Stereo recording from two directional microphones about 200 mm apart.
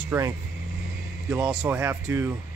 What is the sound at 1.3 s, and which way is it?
Speech, 5° right (ahead or behind).